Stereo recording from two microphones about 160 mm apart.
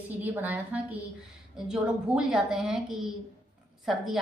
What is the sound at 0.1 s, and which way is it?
A woman's voice, 10° right (ahead or behind).